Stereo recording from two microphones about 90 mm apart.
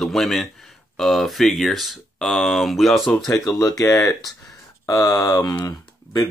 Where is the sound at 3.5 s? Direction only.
40° left (ahead or behind).